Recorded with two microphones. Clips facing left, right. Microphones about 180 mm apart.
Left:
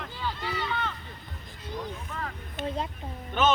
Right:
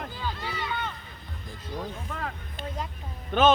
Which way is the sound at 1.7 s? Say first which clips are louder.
Right 1 dB; 50° right (ahead or behind).